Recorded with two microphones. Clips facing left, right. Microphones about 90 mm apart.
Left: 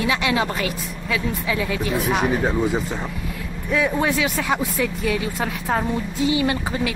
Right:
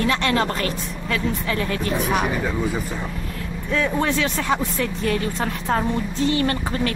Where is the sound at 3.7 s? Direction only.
10° left (ahead or behind).